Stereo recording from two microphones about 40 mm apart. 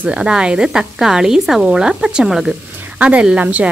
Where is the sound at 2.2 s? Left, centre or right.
Centre.